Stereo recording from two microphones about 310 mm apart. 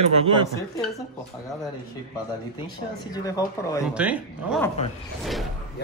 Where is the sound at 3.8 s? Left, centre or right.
Centre.